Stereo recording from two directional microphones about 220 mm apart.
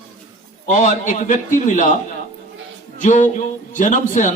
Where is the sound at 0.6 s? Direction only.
35° left (ahead or behind).